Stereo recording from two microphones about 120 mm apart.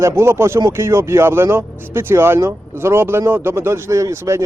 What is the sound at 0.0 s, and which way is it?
A man's voice, 20° right (ahead or behind).